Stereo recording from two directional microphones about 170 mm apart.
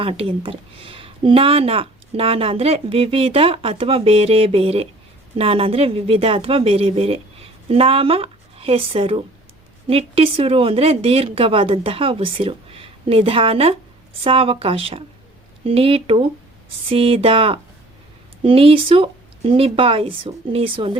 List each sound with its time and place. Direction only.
0.0 s speech: 35° right (ahead or behind)